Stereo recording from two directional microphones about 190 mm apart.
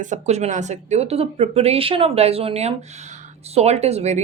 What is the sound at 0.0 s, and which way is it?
Speech, 40° right (ahead or behind).